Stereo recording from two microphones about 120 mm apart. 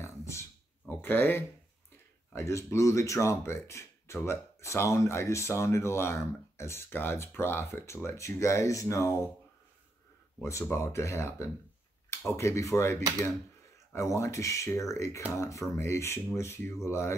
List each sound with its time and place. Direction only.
0.0 s a sound: 25° left (ahead or behind)
2.3 s speech: 25° left (ahead or behind)
10.4 s speech: 20° left (ahead or behind)